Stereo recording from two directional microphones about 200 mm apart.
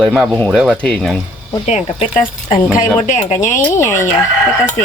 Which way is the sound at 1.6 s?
35° left (ahead or behind).